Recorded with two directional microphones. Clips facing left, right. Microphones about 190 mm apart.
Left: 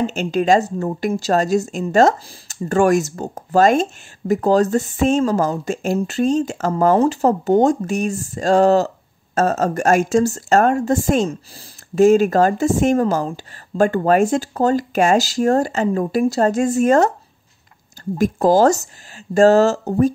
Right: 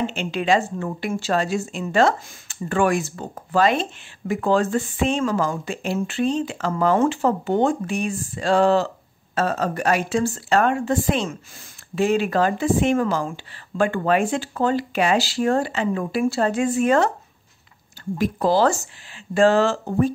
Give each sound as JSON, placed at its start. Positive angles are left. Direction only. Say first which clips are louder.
{"t": 0.0, "sound": "a woman's voice", "louder": "left 5 dB", "side_deg": 40}
{"t": 18.1, "sound": "a woman's voice", "louder": "left 5 dB", "side_deg": 45}